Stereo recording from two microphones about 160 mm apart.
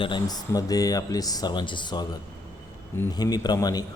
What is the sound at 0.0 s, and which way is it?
Speech, 25° left (ahead or behind).